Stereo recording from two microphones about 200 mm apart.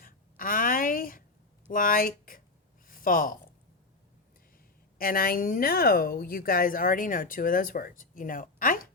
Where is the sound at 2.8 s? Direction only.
45° left (ahead or behind).